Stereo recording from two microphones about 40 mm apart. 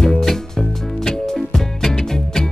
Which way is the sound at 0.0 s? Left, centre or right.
Centre.